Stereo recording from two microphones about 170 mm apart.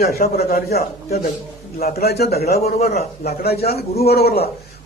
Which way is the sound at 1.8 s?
65° left (ahead or behind).